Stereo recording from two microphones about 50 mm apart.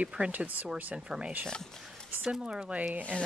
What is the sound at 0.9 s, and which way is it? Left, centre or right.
Speech, right.